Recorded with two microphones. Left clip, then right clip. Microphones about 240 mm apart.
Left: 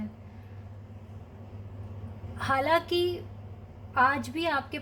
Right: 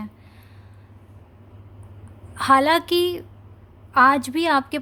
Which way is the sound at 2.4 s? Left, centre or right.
Right.